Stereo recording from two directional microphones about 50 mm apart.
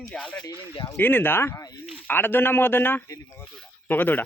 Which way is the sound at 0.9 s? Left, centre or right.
Left.